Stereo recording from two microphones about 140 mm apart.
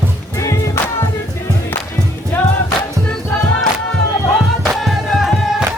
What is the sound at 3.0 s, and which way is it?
Music, 5° left (ahead or behind).